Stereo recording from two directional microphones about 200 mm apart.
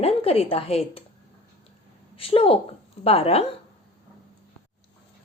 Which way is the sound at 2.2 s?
30° left (ahead or behind).